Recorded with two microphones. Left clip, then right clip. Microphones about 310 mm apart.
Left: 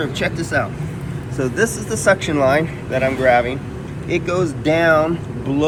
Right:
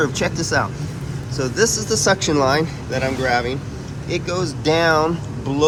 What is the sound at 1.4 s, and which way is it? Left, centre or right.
Speech, centre.